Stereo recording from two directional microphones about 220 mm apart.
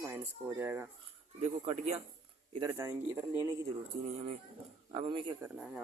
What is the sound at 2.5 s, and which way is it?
Cutlery, 15° right (ahead or behind).